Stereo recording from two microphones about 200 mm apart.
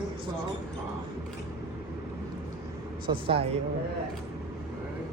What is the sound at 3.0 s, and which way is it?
Speech, 25° right (ahead or behind).